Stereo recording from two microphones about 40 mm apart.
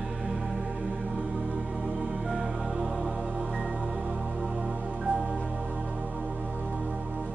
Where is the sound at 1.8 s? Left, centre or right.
Right.